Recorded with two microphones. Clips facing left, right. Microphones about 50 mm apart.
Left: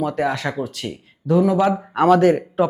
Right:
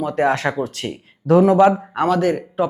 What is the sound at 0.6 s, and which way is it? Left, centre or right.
Speech, right.